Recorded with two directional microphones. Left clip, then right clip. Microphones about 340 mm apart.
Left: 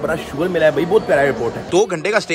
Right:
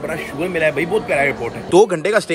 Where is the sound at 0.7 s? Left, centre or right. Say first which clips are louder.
Left 5 dB; left.